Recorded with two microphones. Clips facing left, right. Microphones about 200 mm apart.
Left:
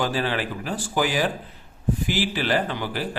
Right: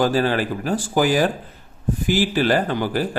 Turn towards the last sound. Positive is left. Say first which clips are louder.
# right 5 dB
turn(degrees=-45)  # may be behind; listen again after turning